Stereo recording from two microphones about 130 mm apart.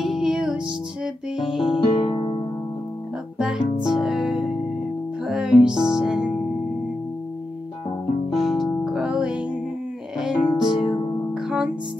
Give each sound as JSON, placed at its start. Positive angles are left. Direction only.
{"t": 0.0, "sound": "music", "side_deg": -5}
{"t": 1.7, "sound": "music", "side_deg": 40}
{"t": 3.3, "sound": "music", "side_deg": -5}
{"t": 8.3, "sound": "music", "side_deg": 0}
{"t": 10.4, "sound": "music", "side_deg": 35}
{"t": 11.4, "sound": "music", "side_deg": -5}